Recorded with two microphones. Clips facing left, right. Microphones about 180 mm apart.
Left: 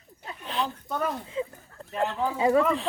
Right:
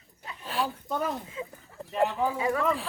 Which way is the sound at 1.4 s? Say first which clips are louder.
Left 7 dB; 30° left (ahead or behind).